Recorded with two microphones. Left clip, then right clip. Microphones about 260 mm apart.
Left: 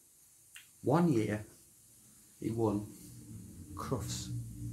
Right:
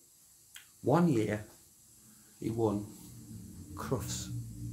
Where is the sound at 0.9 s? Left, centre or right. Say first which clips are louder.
Right 2 dB; centre.